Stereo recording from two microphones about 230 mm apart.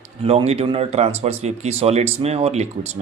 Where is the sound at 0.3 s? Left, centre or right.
Right.